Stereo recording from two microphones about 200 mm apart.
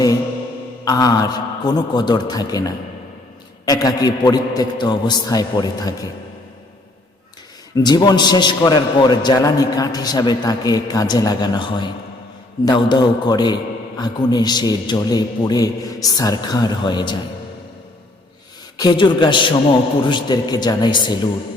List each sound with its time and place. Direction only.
0.9 s a man's voice: 20° left (ahead or behind)
7.8 s a man's voice: 20° left (ahead or behind)
18.8 s a man's voice: 20° left (ahead or behind)